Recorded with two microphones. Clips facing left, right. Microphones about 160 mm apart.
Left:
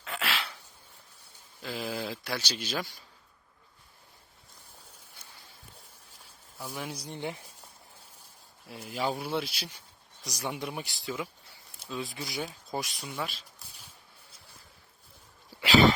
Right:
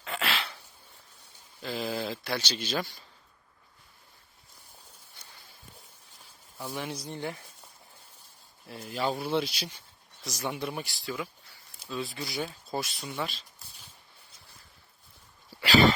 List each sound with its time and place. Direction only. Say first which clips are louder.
0.0 s a sound: right 2 dB; 5° left (ahead or behind)
1.6 s speech: right 2 dB; 5° left (ahead or behind)
6.6 s speech: right 2 dB; centre (ahead or behind)
8.7 s speech: right 1 dB; 10° left (ahead or behind)
10.4 s speech: right 2 dB; 15° left (ahead or behind)
13.0 s speech: right 1 dB; centre (ahead or behind)
15.6 s a sound: even; 20° left (ahead or behind)